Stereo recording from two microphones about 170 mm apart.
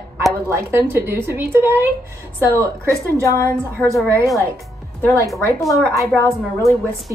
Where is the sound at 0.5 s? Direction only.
15° right (ahead or behind).